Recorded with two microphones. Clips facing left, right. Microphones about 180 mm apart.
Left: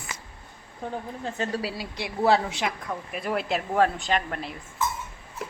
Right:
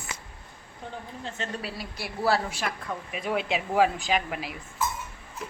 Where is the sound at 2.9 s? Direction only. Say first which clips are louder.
Left 1 dB; centre (ahead or behind).